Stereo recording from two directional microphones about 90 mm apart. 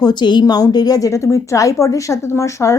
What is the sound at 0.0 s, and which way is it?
A woman's voice, 55° left (ahead or behind).